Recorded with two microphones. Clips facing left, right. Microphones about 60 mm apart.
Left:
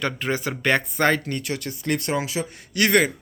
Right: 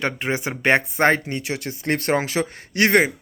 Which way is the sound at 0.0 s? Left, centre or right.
Right.